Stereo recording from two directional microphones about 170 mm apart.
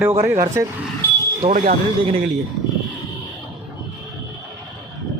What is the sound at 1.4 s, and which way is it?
Speech, 35° right (ahead or behind).